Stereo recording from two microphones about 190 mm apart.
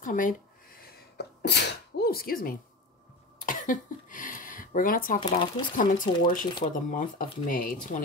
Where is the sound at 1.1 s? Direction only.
60° left (ahead or behind).